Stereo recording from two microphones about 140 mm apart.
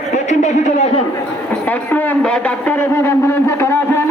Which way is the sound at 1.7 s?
10° left (ahead or behind).